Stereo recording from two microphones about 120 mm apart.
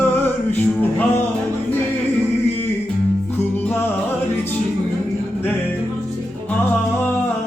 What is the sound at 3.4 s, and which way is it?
Music, 15° left (ahead or behind).